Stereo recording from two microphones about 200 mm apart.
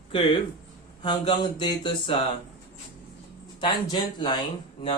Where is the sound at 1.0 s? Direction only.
25° left (ahead or behind).